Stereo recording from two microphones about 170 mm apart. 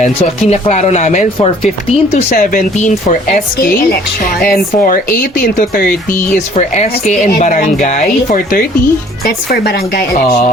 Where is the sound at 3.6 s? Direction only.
60° left (ahead or behind).